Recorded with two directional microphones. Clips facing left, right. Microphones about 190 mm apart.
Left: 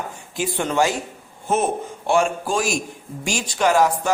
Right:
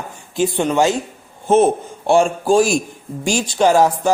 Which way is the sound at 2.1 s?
30° right (ahead or behind).